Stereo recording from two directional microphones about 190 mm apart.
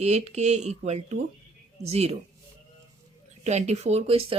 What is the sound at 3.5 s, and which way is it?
Speech, 35° right (ahead or behind).